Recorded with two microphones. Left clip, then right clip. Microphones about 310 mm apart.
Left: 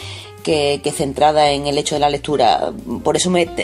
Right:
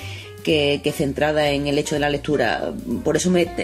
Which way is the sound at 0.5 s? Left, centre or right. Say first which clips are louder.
Left 2 dB; left.